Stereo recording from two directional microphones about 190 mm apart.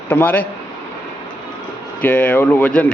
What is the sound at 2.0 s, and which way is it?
Speech, 10° left (ahead or behind).